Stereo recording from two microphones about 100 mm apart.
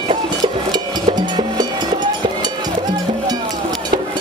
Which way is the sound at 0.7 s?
45° right (ahead or behind).